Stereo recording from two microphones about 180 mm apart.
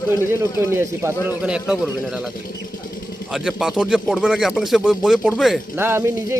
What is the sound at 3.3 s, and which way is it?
A man's voice, 5° right (ahead or behind).